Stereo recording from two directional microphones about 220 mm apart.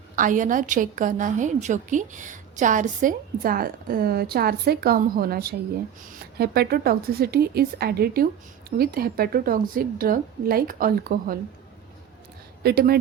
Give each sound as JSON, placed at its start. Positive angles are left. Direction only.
{"t": 0.2, "sound": "a woman's voice", "side_deg": -35}
{"t": 12.6, "sound": "speech", "side_deg": -45}